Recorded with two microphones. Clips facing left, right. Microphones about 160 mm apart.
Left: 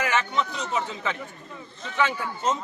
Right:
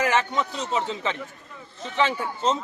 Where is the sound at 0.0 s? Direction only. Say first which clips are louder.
Right 2 dB; 35° right (ahead or behind).